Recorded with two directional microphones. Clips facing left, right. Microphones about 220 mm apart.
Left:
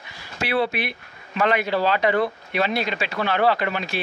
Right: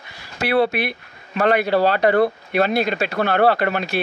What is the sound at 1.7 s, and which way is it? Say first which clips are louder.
Speech: right 4 dB; 55° right (ahead or behind).